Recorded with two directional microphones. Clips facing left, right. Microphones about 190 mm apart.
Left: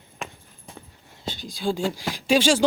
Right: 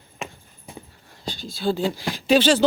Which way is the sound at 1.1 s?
20° left (ahead or behind).